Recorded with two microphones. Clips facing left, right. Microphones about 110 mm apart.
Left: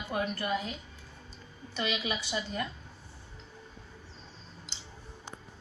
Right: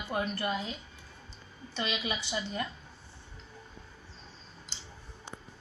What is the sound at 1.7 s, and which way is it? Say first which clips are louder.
Speech: left 1 dB; 20° right (ahead or behind).